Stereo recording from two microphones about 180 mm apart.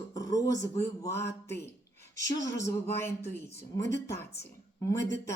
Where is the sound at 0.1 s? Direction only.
20° left (ahead or behind).